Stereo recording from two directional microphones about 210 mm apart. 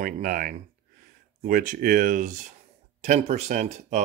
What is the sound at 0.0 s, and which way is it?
Speech, 40° right (ahead or behind).